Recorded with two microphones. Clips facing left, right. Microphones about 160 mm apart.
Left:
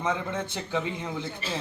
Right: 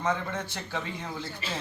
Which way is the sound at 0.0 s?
20° left (ahead or behind).